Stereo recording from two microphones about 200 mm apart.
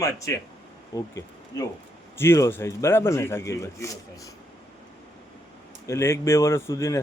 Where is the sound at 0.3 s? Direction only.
15° left (ahead or behind).